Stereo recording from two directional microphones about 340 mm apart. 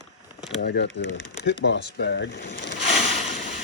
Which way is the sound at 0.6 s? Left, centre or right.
Left.